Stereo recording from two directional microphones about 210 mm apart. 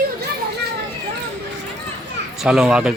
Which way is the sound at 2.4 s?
5° right (ahead or behind).